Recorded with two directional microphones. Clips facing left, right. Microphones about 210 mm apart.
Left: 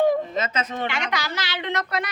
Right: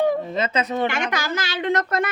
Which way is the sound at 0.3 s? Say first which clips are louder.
Right 3 dB; 30° right (ahead or behind).